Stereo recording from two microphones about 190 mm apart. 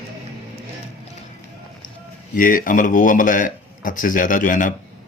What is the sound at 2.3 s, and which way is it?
Speech, 45° left (ahead or behind).